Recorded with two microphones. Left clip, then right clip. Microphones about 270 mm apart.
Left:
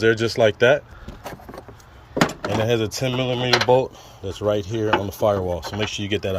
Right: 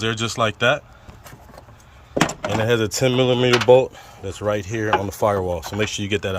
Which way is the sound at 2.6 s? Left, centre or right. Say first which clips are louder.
Right 3 dB; centre.